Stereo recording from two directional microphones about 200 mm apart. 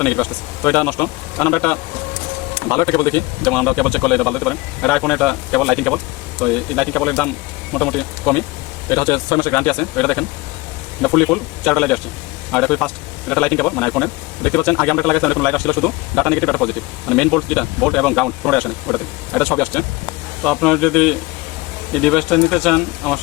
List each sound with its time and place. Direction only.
0.0 s speech: 5° left (ahead or behind)
3.4 s speech: 5° left (ahead or behind)